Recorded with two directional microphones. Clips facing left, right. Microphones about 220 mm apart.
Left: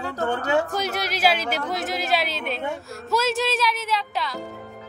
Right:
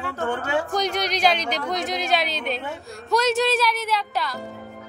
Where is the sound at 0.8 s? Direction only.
5° left (ahead or behind).